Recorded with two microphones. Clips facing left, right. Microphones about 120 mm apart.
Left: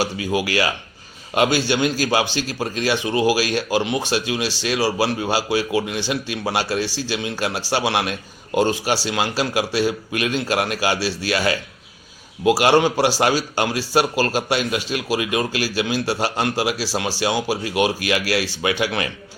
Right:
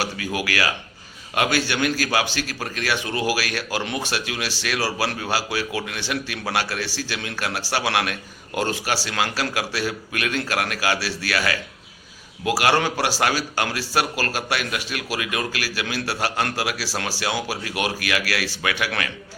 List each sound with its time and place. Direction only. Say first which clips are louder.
0.0 s a man's voice: left 5 dB; 20° left (ahead or behind)